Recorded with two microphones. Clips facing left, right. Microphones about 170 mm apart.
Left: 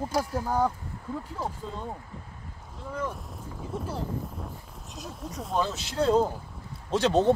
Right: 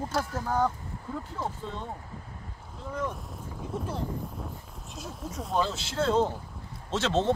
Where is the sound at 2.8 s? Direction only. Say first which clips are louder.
Even; centre (ahead or behind).